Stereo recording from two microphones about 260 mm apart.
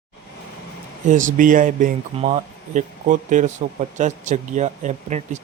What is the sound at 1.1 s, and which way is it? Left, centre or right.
Speech, right.